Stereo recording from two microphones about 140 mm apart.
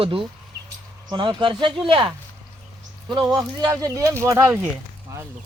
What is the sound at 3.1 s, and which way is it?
Speech, 30° right (ahead or behind).